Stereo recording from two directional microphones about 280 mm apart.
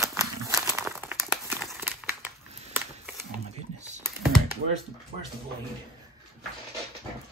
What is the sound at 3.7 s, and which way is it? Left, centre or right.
Computer keyboard, right.